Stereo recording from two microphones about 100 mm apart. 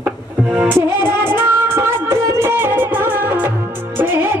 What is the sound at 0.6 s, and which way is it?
Music, 25° right (ahead or behind).